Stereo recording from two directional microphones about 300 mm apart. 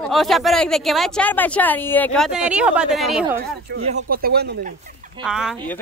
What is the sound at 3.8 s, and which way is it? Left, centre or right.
Speech, right.